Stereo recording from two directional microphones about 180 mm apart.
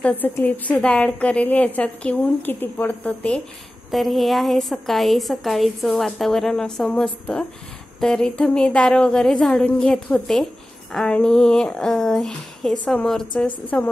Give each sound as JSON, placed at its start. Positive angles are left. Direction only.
{"t": 0.0, "sound": "a woman's voice", "side_deg": 10}